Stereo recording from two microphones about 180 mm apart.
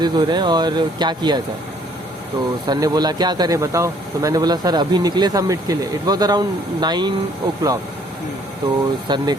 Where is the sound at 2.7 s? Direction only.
25° right (ahead or behind).